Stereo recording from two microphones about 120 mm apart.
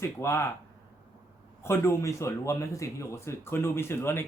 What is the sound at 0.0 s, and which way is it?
Speech, 20° left (ahead or behind).